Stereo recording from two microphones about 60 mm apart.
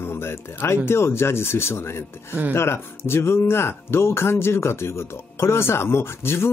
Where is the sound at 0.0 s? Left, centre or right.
Left.